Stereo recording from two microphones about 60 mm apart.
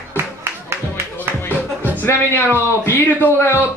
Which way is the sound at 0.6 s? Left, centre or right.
Right.